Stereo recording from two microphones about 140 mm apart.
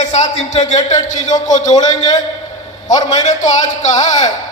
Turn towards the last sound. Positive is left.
turn(degrees=55)  # may be behind; listen again after turning